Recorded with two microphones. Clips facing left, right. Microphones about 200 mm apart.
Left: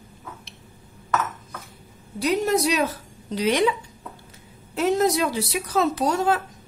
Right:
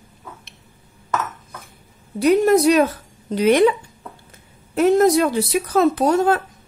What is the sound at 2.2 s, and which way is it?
Speech, 55° right (ahead or behind).